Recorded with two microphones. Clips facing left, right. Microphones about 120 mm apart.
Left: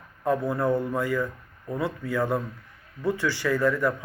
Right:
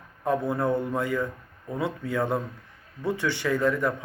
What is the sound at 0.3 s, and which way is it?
Speech, 20° right (ahead or behind).